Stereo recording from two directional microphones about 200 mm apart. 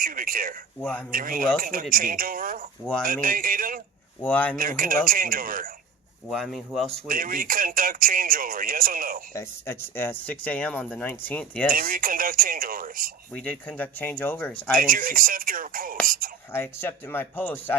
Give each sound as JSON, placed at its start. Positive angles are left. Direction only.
{"t": 0.0, "sound": "speech", "side_deg": -45}
{"t": 0.8, "sound": "speech", "side_deg": 5}
{"t": 1.1, "sound": "speech", "side_deg": -45}
{"t": 4.2, "sound": "speech", "side_deg": 5}
{"t": 4.5, "sound": "speech", "side_deg": -45}
{"t": 6.3, "sound": "speech", "side_deg": 0}
{"t": 7.1, "sound": "speech", "side_deg": -45}
{"t": 9.3, "sound": "speech", "side_deg": 10}
{"t": 11.7, "sound": "speech", "side_deg": -45}
{"t": 13.3, "sound": "speech", "side_deg": 5}
{"t": 14.8, "sound": "speech", "side_deg": -45}
{"t": 16.5, "sound": "speech", "side_deg": 10}